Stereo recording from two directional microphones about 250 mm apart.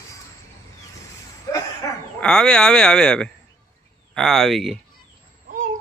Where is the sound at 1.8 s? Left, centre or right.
Centre.